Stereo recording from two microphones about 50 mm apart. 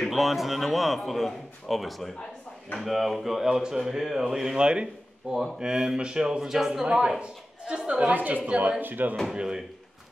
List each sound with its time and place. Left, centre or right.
0.1 s a man's voice: centre
6.9 s speech: centre
8.1 s a woman's voice: right
8.8 s a woman's voice: right
9.3 s speech: centre